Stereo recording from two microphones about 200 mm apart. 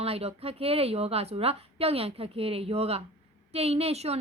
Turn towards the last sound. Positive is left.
turn(degrees=-30)  # may be behind; listen again after turning